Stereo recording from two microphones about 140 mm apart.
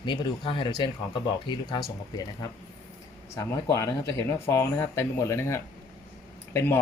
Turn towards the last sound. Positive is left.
turn(degrees=15)  # may be behind; listen again after turning